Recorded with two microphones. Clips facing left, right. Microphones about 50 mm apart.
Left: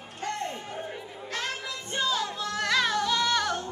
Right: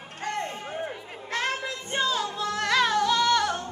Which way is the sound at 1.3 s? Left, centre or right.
Right.